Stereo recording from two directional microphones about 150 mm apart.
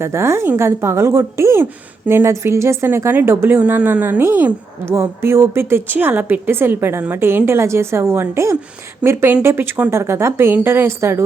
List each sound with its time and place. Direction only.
0.0 s a woman's voice: 15° right (ahead or behind)